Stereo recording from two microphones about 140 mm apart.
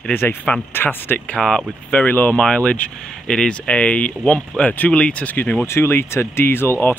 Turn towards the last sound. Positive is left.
turn(degrees=15)  # may be behind; listen again after turning